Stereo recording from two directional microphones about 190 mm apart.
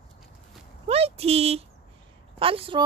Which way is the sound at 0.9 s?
30° right (ahead or behind).